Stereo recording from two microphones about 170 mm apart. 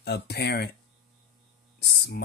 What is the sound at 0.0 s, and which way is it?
Speech, 70° left (ahead or behind).